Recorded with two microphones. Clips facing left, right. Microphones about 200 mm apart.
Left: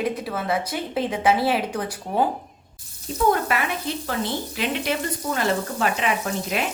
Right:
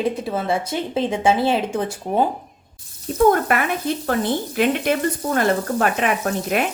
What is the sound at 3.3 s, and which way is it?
Speech, 50° right (ahead or behind).